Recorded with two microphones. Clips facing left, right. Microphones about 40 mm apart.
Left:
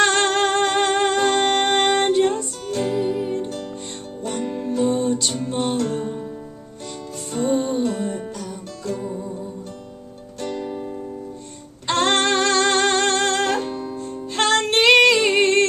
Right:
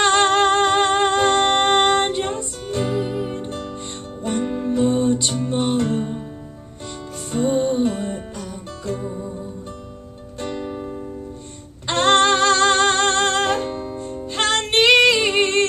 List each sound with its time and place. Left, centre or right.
0.0 s music: right
7.3 s music: centre
10.4 s music: right